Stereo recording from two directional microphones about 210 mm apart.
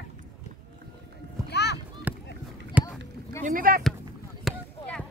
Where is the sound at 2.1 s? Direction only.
10° right (ahead or behind).